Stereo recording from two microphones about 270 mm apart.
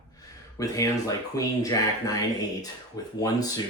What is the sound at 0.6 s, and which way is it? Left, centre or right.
Speech, centre.